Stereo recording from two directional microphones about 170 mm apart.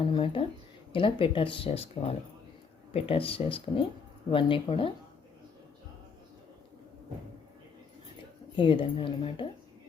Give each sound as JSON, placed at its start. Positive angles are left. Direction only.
{"t": 0.0, "sound": "speech", "side_deg": 30}
{"t": 8.5, "sound": "speech", "side_deg": 30}